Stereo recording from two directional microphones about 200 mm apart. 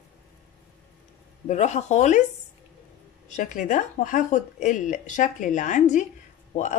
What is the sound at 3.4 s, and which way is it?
A woman's voice, 40° left (ahead or behind).